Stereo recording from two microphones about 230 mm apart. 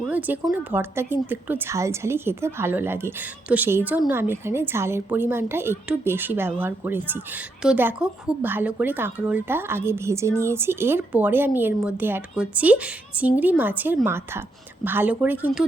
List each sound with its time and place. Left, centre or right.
0.0 s a woman's voice: centre